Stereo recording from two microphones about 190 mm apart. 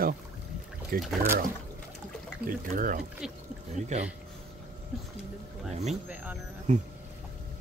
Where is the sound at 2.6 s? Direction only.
45° right (ahead or behind).